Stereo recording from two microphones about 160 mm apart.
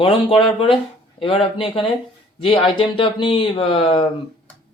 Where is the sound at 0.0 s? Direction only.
35° left (ahead or behind).